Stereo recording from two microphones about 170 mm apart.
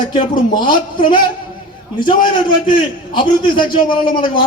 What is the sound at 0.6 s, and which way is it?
Speech, 30° left (ahead or behind).